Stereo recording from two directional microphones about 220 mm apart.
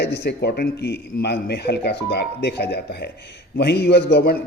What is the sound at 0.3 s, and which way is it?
A man's voice, 45° left (ahead or behind).